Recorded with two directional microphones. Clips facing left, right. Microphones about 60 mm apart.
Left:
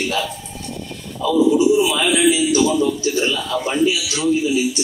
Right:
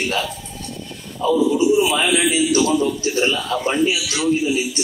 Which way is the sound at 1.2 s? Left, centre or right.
Right.